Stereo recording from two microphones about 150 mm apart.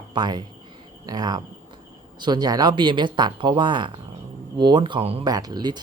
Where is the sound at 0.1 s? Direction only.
30° right (ahead or behind).